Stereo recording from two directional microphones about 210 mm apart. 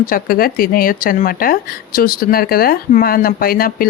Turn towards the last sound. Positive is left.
turn(degrees=45)  # may be behind; listen again after turning